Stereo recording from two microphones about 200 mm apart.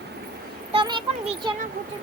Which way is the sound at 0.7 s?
25° right (ahead or behind).